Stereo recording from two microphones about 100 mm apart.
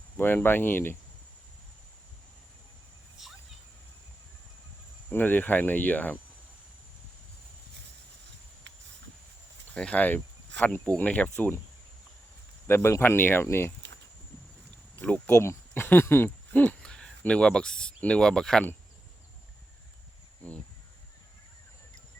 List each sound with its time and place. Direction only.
0.2 s speech: 20° left (ahead or behind)
5.0 s cricket: 20° left (ahead or behind)
9.7 s cricket: 10° left (ahead or behind)
12.6 s speech: 25° left (ahead or behind)
15.3 s speech: 30° left (ahead or behind); by 18.6 s 5° left (ahead or behind)